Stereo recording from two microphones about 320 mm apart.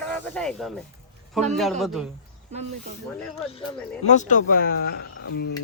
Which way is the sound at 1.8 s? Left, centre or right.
Centre.